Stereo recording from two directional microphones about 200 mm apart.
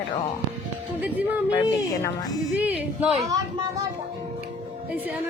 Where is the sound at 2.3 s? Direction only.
5° right (ahead or behind).